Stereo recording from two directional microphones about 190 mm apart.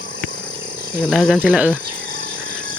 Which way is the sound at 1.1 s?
Centre (ahead or behind).